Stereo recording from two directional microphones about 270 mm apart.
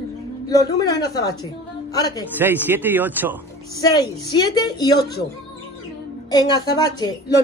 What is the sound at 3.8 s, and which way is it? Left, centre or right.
A woman's voice, centre.